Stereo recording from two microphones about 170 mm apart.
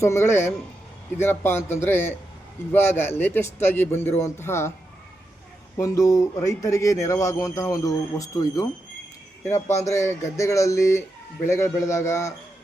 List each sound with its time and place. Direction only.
0.0 s speech: 15° left (ahead or behind)
5.7 s speech: 20° left (ahead or behind)
9.8 s speech: 20° left (ahead or behind)